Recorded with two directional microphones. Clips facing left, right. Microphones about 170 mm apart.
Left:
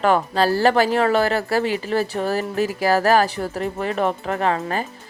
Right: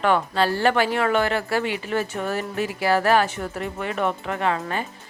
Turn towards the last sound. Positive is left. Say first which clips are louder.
# left 3 dB
turn(degrees=35)  # may be behind; listen again after turning